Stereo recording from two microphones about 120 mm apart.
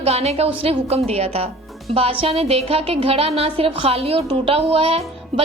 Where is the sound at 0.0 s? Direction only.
55° right (ahead or behind).